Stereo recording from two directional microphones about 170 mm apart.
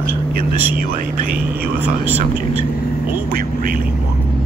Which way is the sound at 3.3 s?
55° right (ahead or behind).